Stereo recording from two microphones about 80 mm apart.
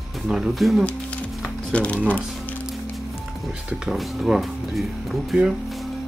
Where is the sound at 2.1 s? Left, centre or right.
Centre.